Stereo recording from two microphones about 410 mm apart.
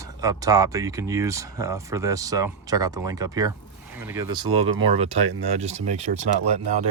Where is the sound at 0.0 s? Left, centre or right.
Centre.